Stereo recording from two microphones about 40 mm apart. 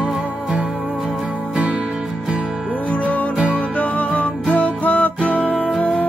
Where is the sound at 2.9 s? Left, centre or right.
Left.